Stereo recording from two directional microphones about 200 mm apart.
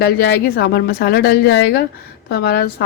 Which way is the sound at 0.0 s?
55° left (ahead or behind).